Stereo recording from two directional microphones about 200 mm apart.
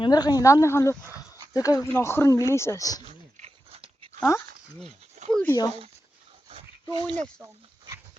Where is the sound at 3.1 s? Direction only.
35° right (ahead or behind).